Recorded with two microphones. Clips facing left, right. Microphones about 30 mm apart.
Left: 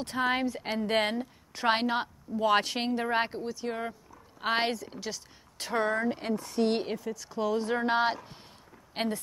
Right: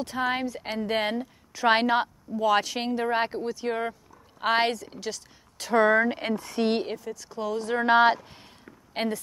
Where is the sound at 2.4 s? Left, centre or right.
Left.